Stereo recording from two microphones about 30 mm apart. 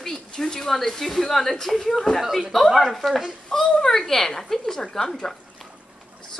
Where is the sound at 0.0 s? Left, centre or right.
Centre.